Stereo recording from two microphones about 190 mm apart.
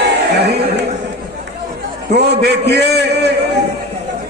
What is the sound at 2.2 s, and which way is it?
A man's voice, 60° right (ahead or behind).